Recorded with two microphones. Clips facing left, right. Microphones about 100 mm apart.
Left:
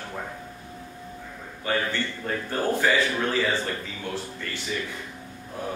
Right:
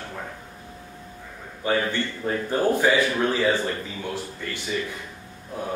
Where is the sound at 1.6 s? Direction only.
15° right (ahead or behind).